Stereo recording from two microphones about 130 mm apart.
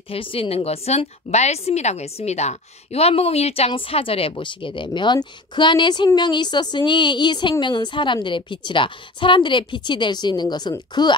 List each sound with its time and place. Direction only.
0.1 s a woman's voice: 45° left (ahead or behind)